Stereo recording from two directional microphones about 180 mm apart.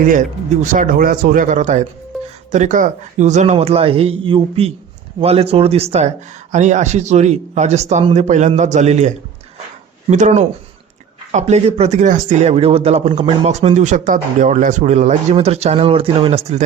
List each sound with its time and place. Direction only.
0.0 s speech: 45° right (ahead or behind)